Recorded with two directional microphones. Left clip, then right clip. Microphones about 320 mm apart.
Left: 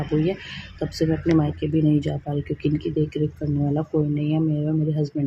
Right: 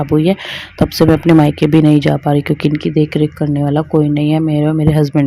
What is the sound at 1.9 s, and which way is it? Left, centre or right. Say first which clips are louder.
Speech: right 12 dB; right.